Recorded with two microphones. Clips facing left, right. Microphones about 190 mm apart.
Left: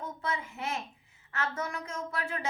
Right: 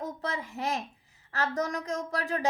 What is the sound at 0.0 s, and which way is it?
A woman's voice, 35° right (ahead or behind).